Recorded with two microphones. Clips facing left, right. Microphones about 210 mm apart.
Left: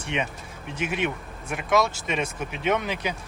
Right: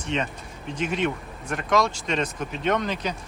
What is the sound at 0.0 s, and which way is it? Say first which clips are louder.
Speech: right 1 dB; 10° left (ahead or behind).